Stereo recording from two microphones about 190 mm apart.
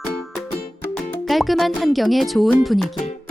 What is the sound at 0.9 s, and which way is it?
Speech, centre (ahead or behind).